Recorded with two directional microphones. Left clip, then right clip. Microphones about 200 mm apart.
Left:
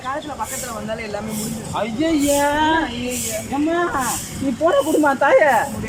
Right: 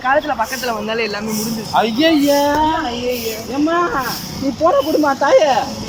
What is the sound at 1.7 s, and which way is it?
Speech, 40° right (ahead or behind).